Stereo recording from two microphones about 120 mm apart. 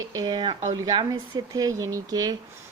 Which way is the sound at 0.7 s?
35° right (ahead or behind).